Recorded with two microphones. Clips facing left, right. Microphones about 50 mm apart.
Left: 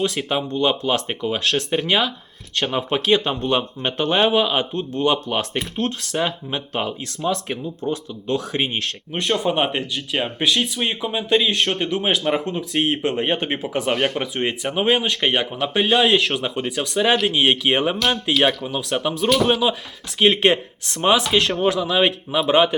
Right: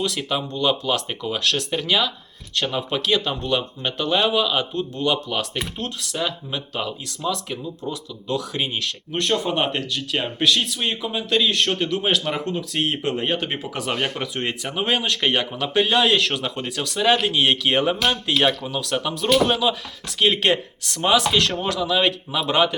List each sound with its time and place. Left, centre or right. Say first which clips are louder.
0.2 s speech: left 3 dB; left
9.1 s speech: left 2 dB; centre
20.1 s speech: left 3 dB; left